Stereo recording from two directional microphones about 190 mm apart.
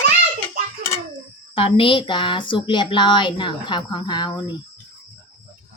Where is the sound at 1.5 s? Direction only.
30° left (ahead or behind).